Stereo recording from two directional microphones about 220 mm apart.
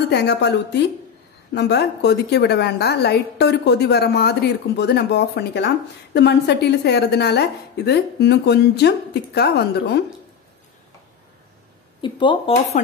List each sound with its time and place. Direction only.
0.1 s a woman's voice: 50° left (ahead or behind)
12.0 s speech: 20° left (ahead or behind)